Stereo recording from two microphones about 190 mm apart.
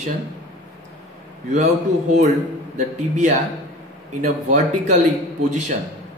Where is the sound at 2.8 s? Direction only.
40° right (ahead or behind).